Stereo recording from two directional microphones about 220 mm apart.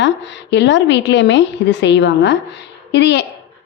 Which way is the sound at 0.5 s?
55° left (ahead or behind).